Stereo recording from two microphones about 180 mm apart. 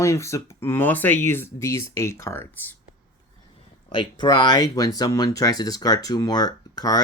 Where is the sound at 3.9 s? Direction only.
25° left (ahead or behind).